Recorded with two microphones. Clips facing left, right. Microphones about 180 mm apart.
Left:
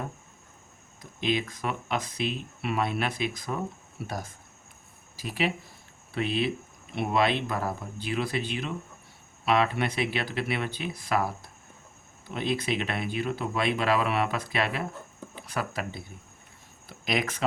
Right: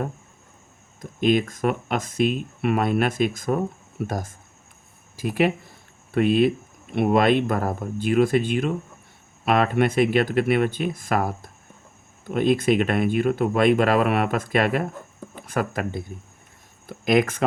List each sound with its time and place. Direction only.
1.2 s speech: 50° right (ahead or behind)